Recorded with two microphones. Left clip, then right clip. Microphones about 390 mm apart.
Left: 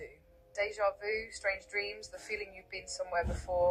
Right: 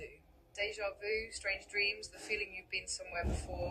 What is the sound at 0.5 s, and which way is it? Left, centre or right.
Speech, centre.